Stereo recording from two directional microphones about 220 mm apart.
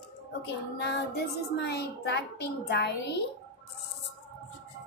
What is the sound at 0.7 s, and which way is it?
A child's voice, 50° left (ahead or behind).